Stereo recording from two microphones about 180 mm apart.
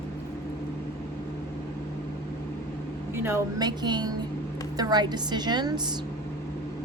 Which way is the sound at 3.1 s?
15° right (ahead or behind).